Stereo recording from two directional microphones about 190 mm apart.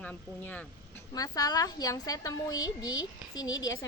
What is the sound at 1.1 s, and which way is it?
A woman's voice, 20° left (ahead or behind).